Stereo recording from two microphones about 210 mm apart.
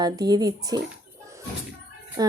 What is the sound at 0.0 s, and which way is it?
Speech, 20° right (ahead or behind).